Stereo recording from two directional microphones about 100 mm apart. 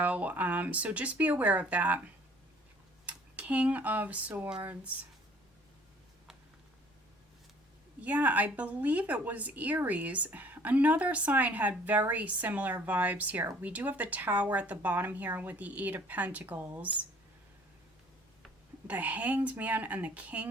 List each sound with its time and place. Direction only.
0.0 s a woman's voice: 15° right (ahead or behind)
3.1 s dishes: 15° right (ahead or behind)
4.6 s speech: 20° right (ahead or behind)
8.0 s a woman's voice: 15° right (ahead or behind)
18.9 s a woman's voice: 15° right (ahead or behind)